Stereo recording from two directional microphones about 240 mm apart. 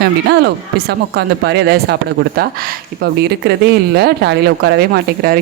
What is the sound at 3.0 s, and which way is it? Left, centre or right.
Speech, right.